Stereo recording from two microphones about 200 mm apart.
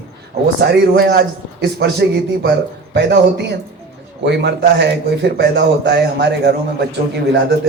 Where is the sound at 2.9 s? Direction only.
60° right (ahead or behind).